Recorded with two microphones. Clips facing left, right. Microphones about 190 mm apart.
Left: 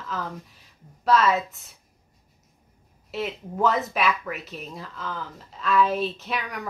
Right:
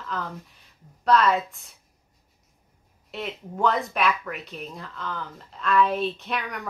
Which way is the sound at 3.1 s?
5° left (ahead or behind).